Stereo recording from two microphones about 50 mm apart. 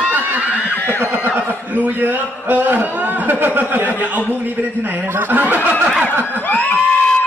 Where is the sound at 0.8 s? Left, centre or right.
Left.